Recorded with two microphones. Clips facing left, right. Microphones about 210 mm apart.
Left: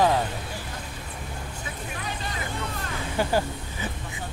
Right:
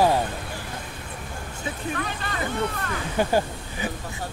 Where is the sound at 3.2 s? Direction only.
15° right (ahead or behind).